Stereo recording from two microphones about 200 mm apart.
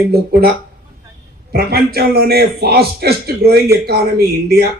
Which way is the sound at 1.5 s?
50° right (ahead or behind).